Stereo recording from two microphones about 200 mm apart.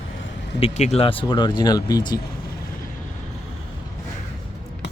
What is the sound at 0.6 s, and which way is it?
Speech, 30° left (ahead or behind).